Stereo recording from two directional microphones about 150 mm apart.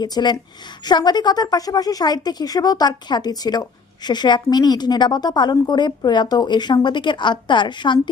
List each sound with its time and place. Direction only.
0.0 s speech: 30° left (ahead or behind)